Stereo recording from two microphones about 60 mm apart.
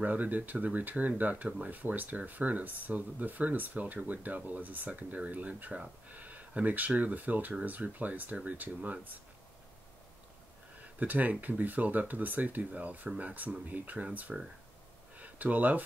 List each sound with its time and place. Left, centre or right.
0.0 s speech: right
11.0 s speech: right